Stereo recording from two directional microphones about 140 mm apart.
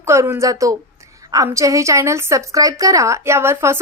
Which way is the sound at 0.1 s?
20° right (ahead or behind).